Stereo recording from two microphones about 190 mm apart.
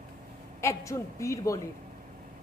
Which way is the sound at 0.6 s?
15° left (ahead or behind).